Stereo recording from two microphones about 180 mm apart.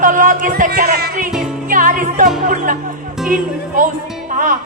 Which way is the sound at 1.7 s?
50° right (ahead or behind).